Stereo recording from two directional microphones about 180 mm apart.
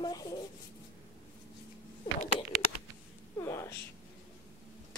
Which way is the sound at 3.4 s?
15° left (ahead or behind).